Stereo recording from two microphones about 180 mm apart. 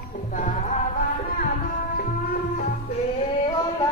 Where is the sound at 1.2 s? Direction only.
55° left (ahead or behind).